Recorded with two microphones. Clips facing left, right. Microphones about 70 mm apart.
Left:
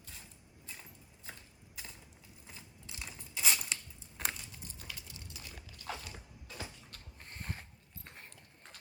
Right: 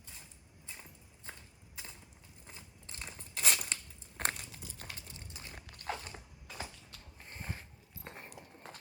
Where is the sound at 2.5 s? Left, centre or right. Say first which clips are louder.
Even; right.